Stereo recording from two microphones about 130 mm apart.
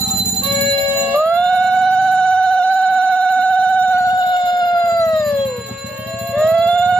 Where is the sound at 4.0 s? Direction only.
30° left (ahead or behind).